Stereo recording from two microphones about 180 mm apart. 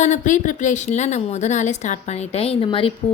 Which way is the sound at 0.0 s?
40° left (ahead or behind).